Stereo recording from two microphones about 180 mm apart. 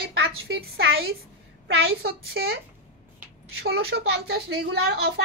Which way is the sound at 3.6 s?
65° right (ahead or behind).